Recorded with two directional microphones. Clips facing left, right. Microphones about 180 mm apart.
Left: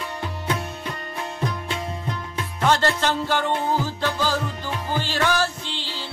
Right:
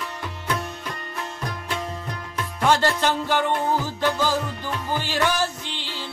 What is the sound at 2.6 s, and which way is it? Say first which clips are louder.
Music: even; 15° right (ahead or behind).